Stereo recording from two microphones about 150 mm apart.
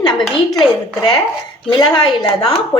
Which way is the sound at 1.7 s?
30° left (ahead or behind).